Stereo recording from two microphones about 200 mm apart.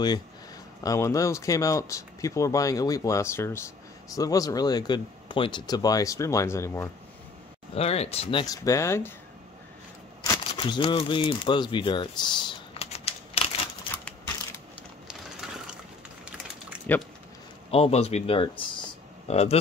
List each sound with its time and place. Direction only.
0.8 s speech: 15° left (ahead or behind)
7.7 s speech: 30° left (ahead or behind); by 9.1 s 15° left (ahead or behind)
10.2 s speech: 15° left (ahead or behind)
14.0 s a sound: 15° left (ahead or behind)
16.7 s a sound: 5° right (ahead or behind)
17.6 s speech: 30° left (ahead or behind)